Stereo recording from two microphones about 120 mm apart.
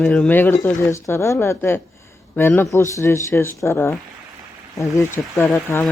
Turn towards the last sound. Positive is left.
turn(degrees=20)  # may be behind; listen again after turning